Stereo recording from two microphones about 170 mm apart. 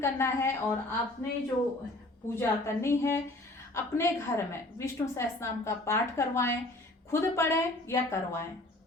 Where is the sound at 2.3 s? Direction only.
15° left (ahead or behind).